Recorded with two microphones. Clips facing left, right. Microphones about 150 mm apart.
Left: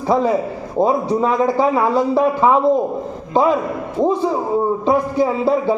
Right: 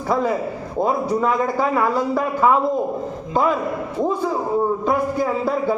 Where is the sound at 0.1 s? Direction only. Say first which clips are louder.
Left 4 dB; 15° left (ahead or behind).